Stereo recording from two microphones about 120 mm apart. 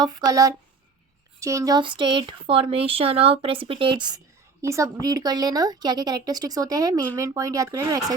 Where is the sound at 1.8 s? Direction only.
45° right (ahead or behind).